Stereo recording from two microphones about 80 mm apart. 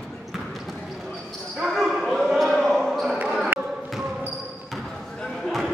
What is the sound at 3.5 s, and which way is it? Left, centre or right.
Basketball bounce, right.